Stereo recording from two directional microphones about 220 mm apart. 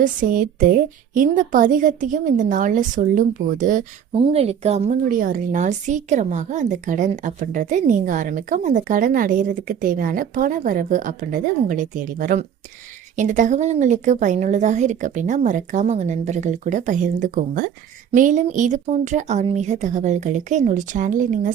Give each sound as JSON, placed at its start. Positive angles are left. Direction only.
{"t": 0.0, "sound": "a woman's voice", "side_deg": -40}
{"t": 4.1, "sound": "a woman's voice", "side_deg": -25}